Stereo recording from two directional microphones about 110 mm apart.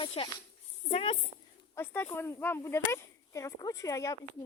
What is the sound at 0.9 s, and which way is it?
Speech, 70° left (ahead or behind).